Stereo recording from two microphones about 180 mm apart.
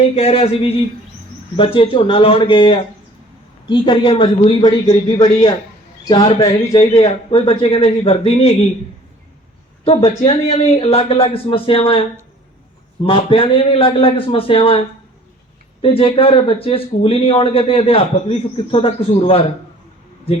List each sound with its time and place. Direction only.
0.0 s a man's voice: 35° left (ahead or behind)
7.0 s speech: 30° left (ahead or behind)
9.8 s speech: 35° left (ahead or behind)
13.1 s speech: 30° left (ahead or behind)
15.8 s speech: 30° left (ahead or behind)